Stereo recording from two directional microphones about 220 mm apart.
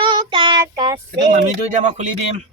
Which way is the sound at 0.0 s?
20° right (ahead or behind).